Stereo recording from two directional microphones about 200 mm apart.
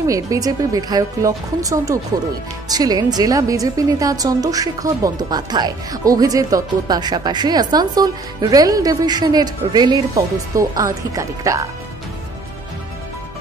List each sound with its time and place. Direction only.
0.0 s a woman's voice: 15° right (ahead or behind)